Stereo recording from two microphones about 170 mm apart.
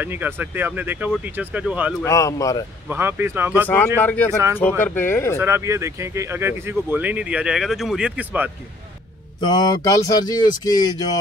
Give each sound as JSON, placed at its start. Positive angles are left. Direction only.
{"t": 0.0, "sound": "speech", "side_deg": -10}
{"t": 2.0, "sound": "speech", "side_deg": 20}
{"t": 2.9, "sound": "speech", "side_deg": -15}
{"t": 3.6, "sound": "speech", "side_deg": 10}
{"t": 5.4, "sound": "speech", "side_deg": -15}
{"t": 9.4, "sound": "speech", "side_deg": 25}